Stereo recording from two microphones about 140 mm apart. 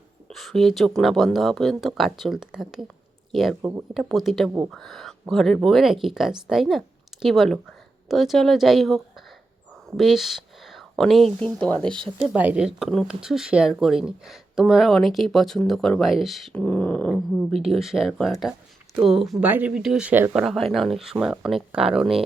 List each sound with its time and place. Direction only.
0.3 s speech: centre (ahead or behind)
3.6 s speech: 20° right (ahead or behind)
3.9 s speech: centre (ahead or behind)
10.0 s speech: centre (ahead or behind)
12.2 s speech: 10° right (ahead or behind)
16.6 s speech: 10° left (ahead or behind); by 20.3 s 15° right (ahead or behind)
20.3 s speech: centre (ahead or behind)